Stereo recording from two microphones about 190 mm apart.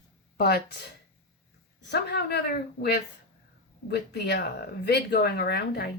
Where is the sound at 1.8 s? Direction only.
60° left (ahead or behind).